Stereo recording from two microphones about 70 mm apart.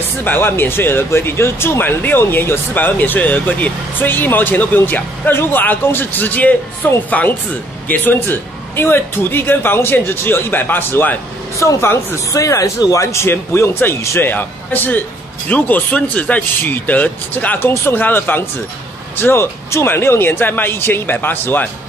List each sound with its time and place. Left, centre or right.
0.2 s speech: left
11.6 s a man's voice: left